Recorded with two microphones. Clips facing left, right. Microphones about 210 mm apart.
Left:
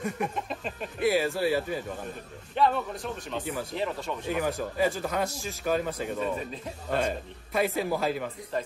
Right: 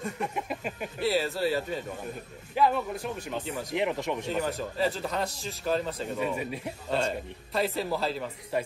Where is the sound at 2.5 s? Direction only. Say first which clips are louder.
Even; 5° right (ahead or behind).